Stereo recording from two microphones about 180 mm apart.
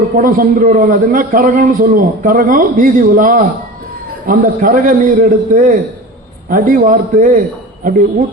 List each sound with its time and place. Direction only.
0.2 s a man's voice: 50° right (ahead or behind)